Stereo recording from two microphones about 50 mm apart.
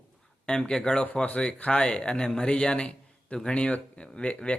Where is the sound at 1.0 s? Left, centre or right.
Left.